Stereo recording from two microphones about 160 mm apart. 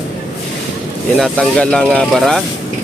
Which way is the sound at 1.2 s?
5° left (ahead or behind).